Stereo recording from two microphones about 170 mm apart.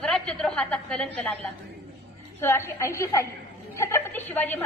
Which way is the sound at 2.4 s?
15° left (ahead or behind).